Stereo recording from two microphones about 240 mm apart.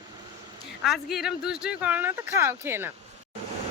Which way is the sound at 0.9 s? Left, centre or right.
Centre.